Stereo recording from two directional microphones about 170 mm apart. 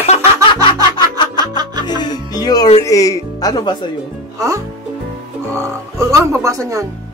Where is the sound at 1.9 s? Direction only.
25° left (ahead or behind).